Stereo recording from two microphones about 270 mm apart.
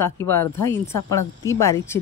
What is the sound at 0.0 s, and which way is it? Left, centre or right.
Speech, centre.